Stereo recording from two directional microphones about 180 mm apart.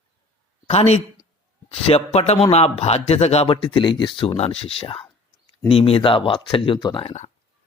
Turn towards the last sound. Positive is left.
turn(degrees=25)  # may be behind; listen again after turning